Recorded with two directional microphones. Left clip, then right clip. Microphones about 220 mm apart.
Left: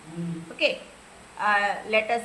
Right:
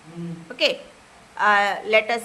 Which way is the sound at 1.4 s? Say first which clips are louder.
Right 5 dB; 50° right (ahead or behind).